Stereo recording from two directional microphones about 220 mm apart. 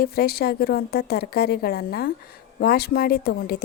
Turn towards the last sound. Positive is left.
turn(degrees=45)  # may be behind; listen again after turning